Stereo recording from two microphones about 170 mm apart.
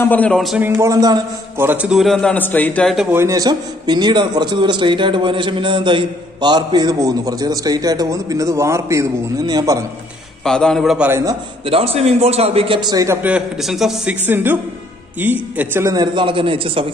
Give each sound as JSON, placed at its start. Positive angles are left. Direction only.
{"t": 0.0, "sound": "speech", "side_deg": 10}
{"t": 0.6, "sound": "a man's voice", "side_deg": -15}
{"t": 1.7, "sound": "a man's voice", "side_deg": -5}
{"t": 3.1, "sound": "a man's voice", "side_deg": -15}
{"t": 10.4, "sound": "a man's voice", "side_deg": 5}
{"t": 11.1, "sound": "a man's voice", "side_deg": -15}
{"t": 11.6, "sound": "a man's voice", "side_deg": -35}
{"t": 15.9, "sound": "a man's voice", "side_deg": -25}